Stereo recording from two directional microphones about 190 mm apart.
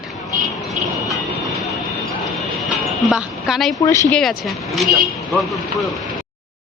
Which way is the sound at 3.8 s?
15° left (ahead or behind).